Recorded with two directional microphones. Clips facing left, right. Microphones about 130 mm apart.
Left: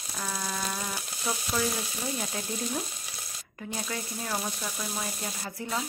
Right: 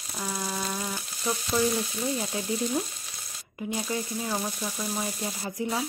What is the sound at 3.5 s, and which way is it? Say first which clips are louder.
Speech: right 5 dB; 15° right (ahead or behind).